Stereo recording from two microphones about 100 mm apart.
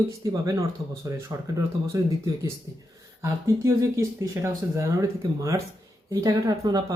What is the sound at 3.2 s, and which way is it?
Speech, 30° right (ahead or behind).